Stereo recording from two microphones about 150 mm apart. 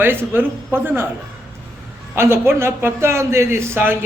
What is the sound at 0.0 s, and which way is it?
A man's voice, 15° right (ahead or behind).